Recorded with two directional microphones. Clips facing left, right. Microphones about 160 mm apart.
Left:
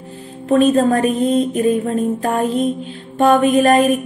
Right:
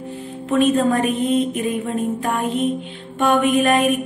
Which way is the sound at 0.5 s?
35° left (ahead or behind).